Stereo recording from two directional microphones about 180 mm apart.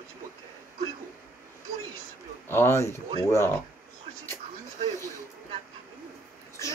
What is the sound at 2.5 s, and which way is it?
Speech, 15° left (ahead or behind).